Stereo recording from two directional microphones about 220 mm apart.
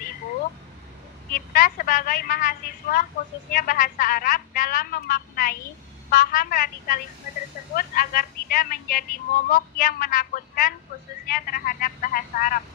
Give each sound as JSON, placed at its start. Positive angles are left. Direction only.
{"t": 1.3, "sound": "speech", "side_deg": 40}